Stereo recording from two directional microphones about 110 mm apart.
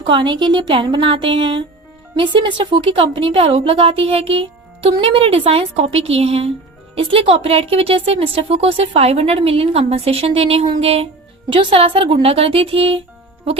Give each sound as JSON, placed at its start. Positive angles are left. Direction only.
{"t": 0.1, "sound": "a woman's voice", "side_deg": -50}